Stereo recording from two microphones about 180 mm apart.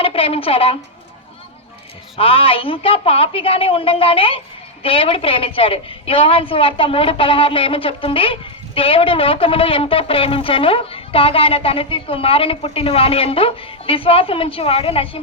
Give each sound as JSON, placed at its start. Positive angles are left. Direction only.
{"t": 0.0, "sound": "a woman's voice", "side_deg": 30}
{"t": 2.1, "sound": "a woman's voice", "side_deg": 30}